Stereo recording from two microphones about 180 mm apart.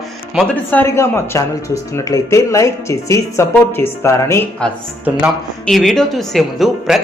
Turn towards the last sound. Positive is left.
turn(degrees=0)  # may be behind; listen again after turning